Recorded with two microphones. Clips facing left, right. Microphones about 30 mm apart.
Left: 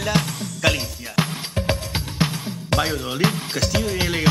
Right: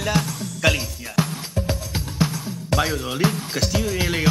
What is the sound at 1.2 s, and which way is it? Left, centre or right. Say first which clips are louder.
Music: even; left.